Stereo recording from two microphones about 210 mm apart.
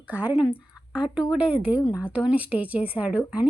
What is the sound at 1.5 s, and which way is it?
Speech, 25° left (ahead or behind).